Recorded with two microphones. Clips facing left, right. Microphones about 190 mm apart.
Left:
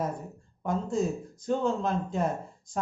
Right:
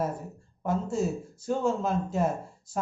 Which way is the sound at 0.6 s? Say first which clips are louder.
Even; 5° right (ahead or behind).